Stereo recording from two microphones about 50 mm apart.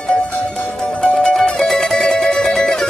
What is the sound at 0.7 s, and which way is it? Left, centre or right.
Music, centre.